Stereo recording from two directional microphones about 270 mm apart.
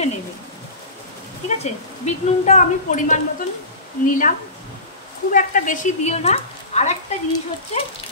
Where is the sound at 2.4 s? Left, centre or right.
Left.